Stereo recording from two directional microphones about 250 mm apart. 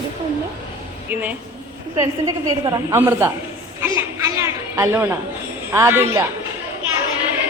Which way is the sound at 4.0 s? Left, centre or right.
Centre.